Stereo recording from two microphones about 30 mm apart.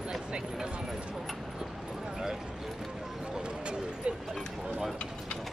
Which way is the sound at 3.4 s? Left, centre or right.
Right.